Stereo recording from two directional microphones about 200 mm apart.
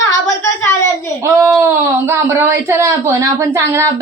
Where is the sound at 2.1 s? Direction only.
10° right (ahead or behind).